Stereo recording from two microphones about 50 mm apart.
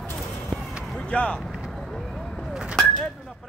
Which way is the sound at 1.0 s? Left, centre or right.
Left.